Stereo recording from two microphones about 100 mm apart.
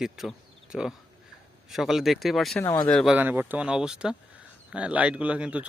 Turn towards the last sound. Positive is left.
turn(degrees=-10)  # may be behind; listen again after turning